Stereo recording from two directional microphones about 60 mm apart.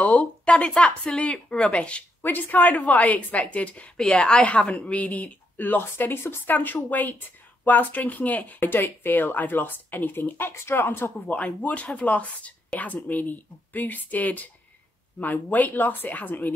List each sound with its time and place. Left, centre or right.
0.0 s speech: left
2.2 s speech: left
3.9 s a woman's voice: centre; by 11.1 s left
11.1 s a woman's voice: left